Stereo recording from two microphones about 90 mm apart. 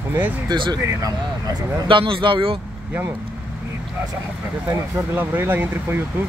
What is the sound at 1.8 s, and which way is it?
Speech, 70° right (ahead or behind).